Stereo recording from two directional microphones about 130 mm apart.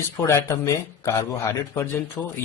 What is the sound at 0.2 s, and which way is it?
A man's voice, 20° left (ahead or behind).